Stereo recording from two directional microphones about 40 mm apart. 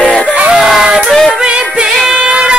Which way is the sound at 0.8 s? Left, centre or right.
Centre.